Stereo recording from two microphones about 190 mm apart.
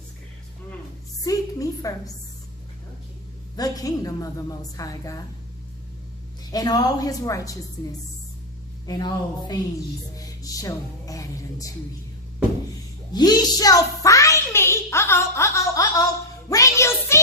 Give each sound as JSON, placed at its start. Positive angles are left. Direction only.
{"t": 1.2, "sound": "a woman's voice", "side_deg": 20}
{"t": 3.5, "sound": "a woman's voice", "side_deg": 20}
{"t": 6.5, "sound": "a woman's voice", "side_deg": 20}
{"t": 8.9, "sound": "a woman's voice", "side_deg": 20}
{"t": 10.2, "sound": "music", "side_deg": 20}
{"t": 13.1, "sound": "a sound", "side_deg": 20}
{"t": 16.5, "sound": "music", "side_deg": 15}